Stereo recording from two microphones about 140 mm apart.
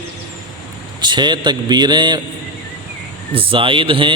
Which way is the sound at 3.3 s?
40° right (ahead or behind).